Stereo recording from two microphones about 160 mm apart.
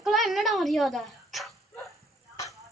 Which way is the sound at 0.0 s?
Centre (ahead or behind).